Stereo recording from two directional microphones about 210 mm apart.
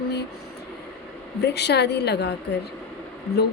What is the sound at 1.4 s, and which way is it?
Speech, 55° left (ahead or behind).